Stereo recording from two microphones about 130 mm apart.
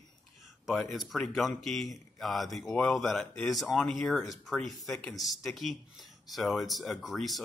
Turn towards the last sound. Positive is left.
turn(degrees=0)  # may be behind; listen again after turning